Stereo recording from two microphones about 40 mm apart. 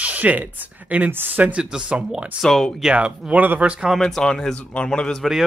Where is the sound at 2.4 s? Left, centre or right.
Centre.